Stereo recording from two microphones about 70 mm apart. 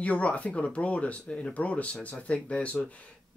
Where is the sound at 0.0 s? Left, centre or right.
Centre.